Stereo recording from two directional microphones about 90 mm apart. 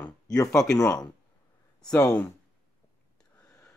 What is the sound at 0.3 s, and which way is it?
Speech, 40° left (ahead or behind).